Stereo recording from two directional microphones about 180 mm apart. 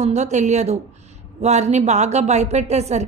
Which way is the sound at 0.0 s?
40° right (ahead or behind).